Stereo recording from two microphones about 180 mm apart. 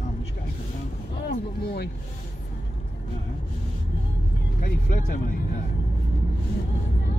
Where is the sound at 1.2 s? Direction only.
65° left (ahead or behind).